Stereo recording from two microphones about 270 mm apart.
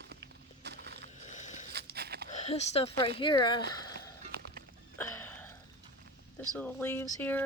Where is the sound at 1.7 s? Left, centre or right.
Right.